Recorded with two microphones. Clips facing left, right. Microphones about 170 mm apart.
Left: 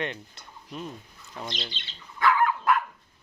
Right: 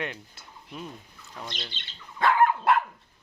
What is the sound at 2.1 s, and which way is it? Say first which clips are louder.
Dog: right 2 dB; 30° right (ahead or behind).